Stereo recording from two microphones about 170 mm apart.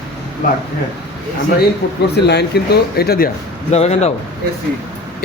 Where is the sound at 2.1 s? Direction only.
80° left.